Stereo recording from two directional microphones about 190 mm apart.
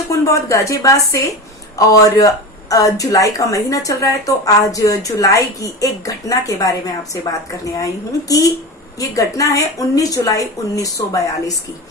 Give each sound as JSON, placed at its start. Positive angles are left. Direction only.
{"t": 0.1, "sound": "speech", "side_deg": 15}
{"t": 9.0, "sound": "speech", "side_deg": 15}